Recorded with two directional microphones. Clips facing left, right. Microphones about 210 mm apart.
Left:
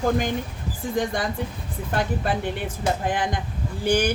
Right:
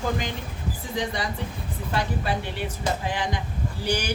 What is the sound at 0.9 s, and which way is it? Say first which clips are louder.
Speech: left 4 dB; 50° left (ahead or behind).